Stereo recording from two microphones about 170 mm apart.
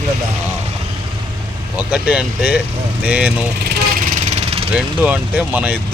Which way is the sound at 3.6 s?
65° right (ahead or behind).